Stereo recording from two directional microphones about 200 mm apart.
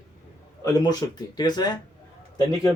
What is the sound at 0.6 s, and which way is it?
Speech, 20° left (ahead or behind).